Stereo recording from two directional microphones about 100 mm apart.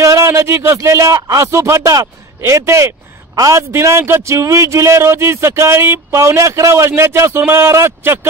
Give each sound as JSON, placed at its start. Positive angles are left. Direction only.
{"t": 0.0, "sound": "a man's voice", "side_deg": -30}